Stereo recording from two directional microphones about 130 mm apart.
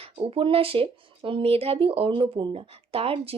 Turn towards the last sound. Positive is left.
turn(degrees=-45)  # may be behind; listen again after turning